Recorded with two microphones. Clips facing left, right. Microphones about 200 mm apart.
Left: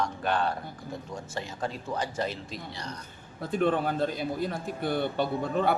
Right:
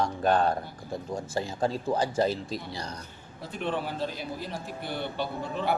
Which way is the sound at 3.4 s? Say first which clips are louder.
Left 6 dB; 50° left (ahead or behind).